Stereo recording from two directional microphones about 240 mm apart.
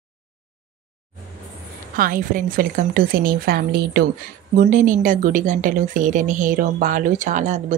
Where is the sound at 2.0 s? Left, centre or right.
Right.